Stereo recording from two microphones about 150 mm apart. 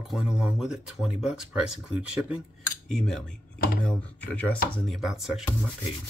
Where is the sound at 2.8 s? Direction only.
5° left (ahead or behind).